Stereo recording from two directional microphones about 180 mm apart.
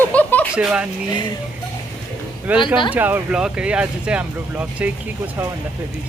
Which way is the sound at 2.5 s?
10° right (ahead or behind).